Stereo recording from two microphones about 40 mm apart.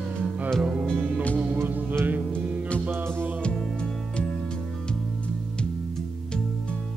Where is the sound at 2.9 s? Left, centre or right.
Right.